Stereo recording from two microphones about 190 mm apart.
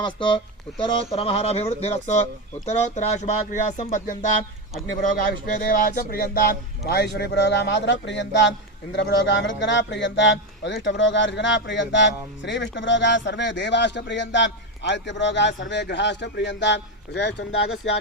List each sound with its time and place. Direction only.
0.0 s speech: 25° left (ahead or behind); by 4.2 s 45° left (ahead or behind)
5.3 s a man's voice: 50° left (ahead or behind)
17.8 s speech: 80° left